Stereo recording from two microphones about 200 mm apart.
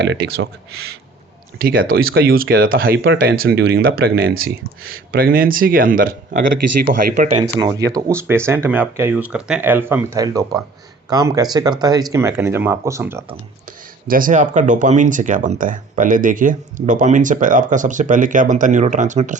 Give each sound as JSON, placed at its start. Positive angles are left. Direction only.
{"t": 0.0, "sound": "speech", "side_deg": -60}
{"t": 1.5, "sound": "speech", "side_deg": -50}
{"t": 7.9, "sound": "speech", "side_deg": -15}
{"t": 14.1, "sound": "speech", "side_deg": -40}